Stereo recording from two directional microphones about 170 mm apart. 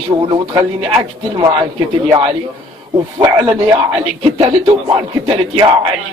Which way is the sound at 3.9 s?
35° right (ahead or behind).